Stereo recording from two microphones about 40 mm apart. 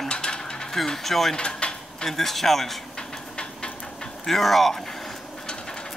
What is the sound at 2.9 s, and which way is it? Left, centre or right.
Steam, centre.